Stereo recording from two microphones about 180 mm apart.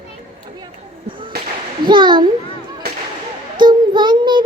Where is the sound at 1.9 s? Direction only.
25° right (ahead or behind).